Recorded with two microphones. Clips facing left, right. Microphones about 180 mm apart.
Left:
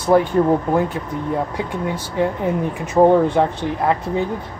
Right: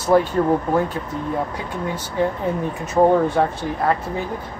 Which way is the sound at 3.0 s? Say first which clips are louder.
Left 2 dB; 20° left (ahead or behind).